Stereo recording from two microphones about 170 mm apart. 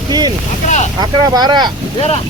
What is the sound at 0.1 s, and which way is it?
Boat, 25° right (ahead or behind).